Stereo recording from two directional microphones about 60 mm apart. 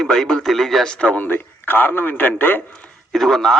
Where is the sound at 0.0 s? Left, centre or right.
Centre.